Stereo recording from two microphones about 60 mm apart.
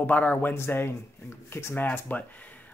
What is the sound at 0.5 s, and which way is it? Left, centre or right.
Speech, left.